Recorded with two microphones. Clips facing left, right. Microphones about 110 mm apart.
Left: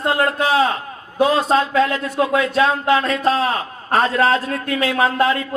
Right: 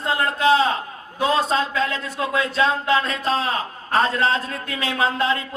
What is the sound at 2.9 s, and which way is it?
A man's voice, 30° right (ahead or behind).